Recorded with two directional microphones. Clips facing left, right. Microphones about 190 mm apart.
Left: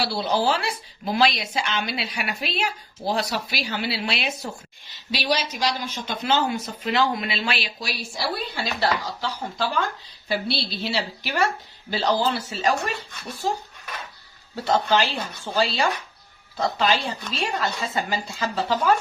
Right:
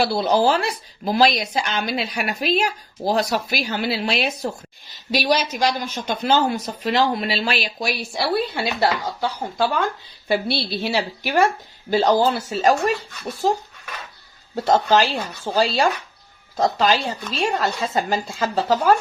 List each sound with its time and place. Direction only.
0.0 s a woman's voice: 50° right (ahead or behind)
8.8 s a woman's voice: 50° right (ahead or behind)
14.5 s a woman's voice: 45° right (ahead or behind)